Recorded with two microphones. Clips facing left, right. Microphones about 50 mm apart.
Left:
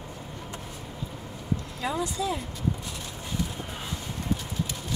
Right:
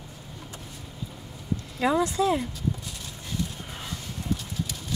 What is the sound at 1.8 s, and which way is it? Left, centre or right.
Speech, right.